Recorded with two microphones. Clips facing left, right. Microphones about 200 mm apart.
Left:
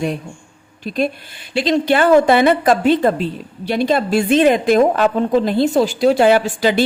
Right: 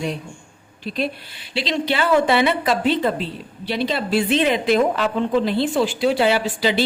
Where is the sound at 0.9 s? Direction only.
45° left (ahead or behind).